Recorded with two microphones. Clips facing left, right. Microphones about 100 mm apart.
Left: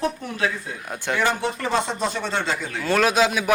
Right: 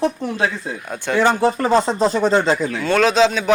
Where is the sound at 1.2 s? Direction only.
35° right (ahead or behind).